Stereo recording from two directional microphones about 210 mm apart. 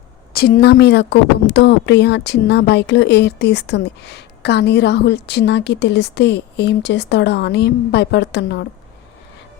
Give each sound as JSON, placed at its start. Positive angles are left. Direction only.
{"t": 0.3, "sound": "speech", "side_deg": 45}